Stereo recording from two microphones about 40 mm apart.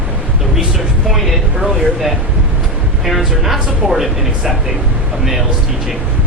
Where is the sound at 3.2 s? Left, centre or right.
Centre.